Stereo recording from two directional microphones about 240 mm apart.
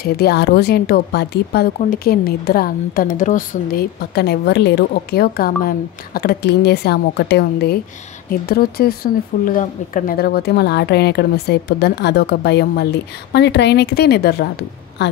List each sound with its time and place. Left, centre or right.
0.0 s speech: left